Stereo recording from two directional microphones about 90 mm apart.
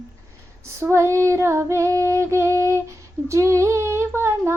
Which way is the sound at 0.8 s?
30° right (ahead or behind).